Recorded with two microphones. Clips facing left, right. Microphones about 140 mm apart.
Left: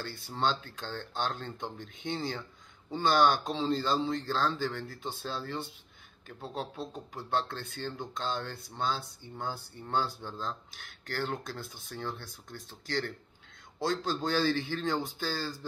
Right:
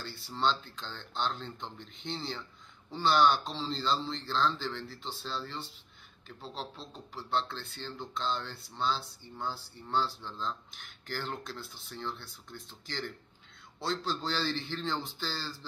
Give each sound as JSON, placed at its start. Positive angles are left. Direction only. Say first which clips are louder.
{"t": 0.0, "sound": "a man's voice", "louder": "even", "side_deg": 50}